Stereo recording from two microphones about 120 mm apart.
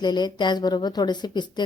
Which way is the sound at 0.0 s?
35° left (ahead or behind).